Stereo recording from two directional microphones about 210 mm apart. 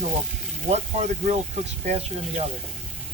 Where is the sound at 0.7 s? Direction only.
35° right (ahead or behind).